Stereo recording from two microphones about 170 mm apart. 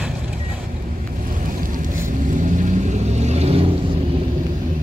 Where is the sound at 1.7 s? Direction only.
50° right (ahead or behind).